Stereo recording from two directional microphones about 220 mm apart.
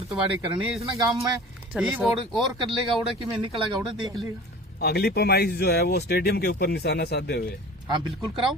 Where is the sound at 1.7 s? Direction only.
Centre (ahead or behind).